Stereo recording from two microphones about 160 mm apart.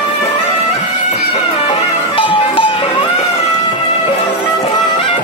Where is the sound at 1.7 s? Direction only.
35° left (ahead or behind).